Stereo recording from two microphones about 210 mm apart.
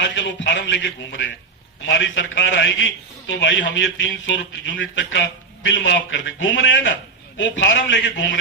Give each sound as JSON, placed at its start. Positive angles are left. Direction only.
{"t": 0.1, "sound": "a man's voice", "side_deg": 60}